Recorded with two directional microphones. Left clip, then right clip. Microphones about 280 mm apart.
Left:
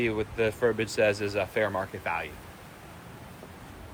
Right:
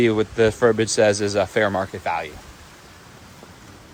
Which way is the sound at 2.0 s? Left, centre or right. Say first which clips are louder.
Right 7 dB; centre.